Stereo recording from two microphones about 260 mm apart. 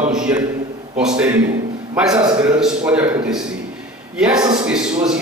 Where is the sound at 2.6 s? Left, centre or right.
Centre.